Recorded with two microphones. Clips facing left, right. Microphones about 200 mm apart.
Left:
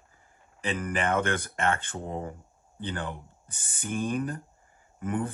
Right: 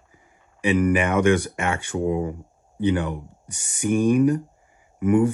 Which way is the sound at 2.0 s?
75° right (ahead or behind).